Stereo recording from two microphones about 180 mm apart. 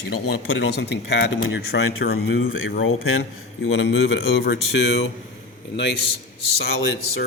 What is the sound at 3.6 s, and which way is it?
Speech, 75° left (ahead or behind).